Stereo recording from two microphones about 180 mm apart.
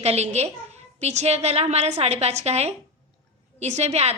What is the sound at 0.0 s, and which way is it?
A woman's voice, 35° right (ahead or behind).